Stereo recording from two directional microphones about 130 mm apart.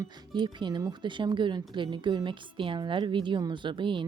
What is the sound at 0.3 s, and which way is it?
Speech, 35° right (ahead or behind).